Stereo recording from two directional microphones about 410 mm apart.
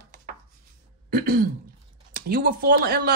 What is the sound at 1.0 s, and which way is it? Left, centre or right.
Throat clearing, right.